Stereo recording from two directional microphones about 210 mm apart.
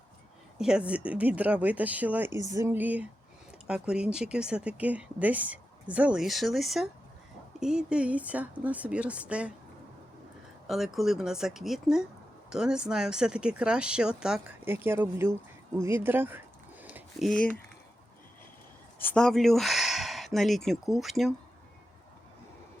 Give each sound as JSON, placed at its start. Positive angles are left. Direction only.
{"t": 0.6, "sound": "speech", "side_deg": -5}
{"t": 10.7, "sound": "speech", "side_deg": 0}
{"t": 16.8, "sound": "a sound", "side_deg": -5}
{"t": 19.0, "sound": "speech", "side_deg": 5}